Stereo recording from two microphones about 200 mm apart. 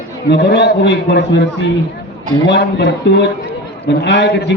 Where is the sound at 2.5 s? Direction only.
60° left (ahead or behind).